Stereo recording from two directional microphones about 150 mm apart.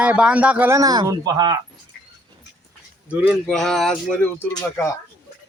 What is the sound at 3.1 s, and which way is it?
Speech, 10° right (ahead or behind).